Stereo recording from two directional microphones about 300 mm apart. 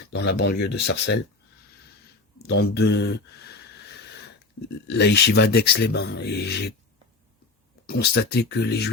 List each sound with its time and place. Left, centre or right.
0.1 s speech: left
2.4 s speech: left
4.9 s speech: left
7.9 s speech: left